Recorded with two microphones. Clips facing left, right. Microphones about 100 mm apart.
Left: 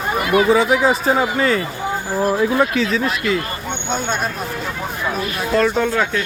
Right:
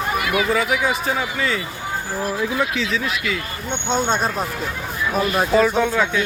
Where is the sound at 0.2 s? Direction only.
35° left (ahead or behind).